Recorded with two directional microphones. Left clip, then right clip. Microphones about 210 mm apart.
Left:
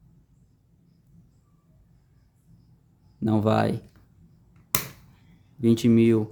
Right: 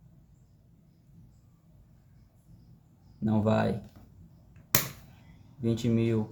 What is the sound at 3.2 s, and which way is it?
Speech, 30° left (ahead or behind).